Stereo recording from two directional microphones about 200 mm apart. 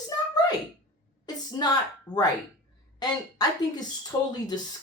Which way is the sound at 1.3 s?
20° left (ahead or behind).